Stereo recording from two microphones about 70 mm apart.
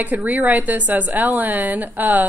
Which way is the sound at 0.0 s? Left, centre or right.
Right.